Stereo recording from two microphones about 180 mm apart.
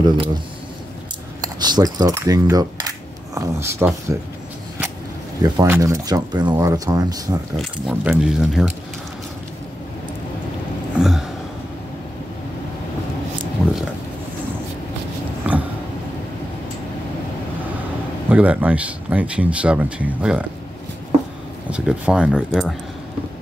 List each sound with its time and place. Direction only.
0.0 s speech: 25° right (ahead or behind)
1.4 s coin: 20° right (ahead or behind)
3.3 s speech: 15° right (ahead or behind)
5.4 s speech: 15° right (ahead or behind)
7.5 s speech: 5° right (ahead or behind)
11.0 s a sound: 5° right (ahead or behind)
15.5 s a sound: 10° right (ahead or behind)
18.3 s speech: 10° right (ahead or behind)
21.6 s speech: 5° right (ahead or behind)